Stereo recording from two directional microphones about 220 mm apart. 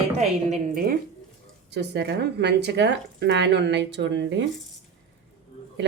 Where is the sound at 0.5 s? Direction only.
40° right (ahead or behind).